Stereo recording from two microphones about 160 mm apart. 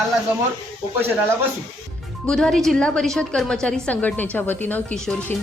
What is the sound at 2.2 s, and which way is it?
A woman's voice, 5° left (ahead or behind).